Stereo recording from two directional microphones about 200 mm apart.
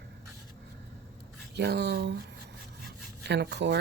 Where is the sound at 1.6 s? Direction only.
55° right (ahead or behind).